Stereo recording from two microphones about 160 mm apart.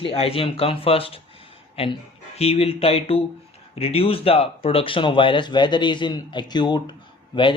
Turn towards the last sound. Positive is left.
turn(degrees=30)  # may be behind; listen again after turning